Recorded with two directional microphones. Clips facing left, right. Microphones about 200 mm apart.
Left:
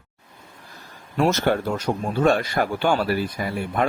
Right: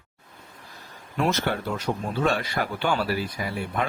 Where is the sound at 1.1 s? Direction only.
45° left (ahead or behind).